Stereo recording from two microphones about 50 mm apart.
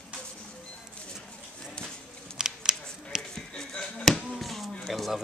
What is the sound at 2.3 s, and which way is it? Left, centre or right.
Scissors, centre.